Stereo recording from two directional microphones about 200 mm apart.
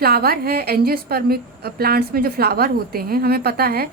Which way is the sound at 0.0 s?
50° right (ahead or behind).